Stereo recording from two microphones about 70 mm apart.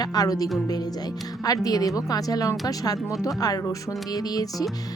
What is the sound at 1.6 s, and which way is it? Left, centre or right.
Speech, left.